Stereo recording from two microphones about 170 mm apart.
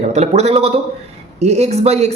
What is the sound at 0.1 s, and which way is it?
A man's voice, 40° right (ahead or behind).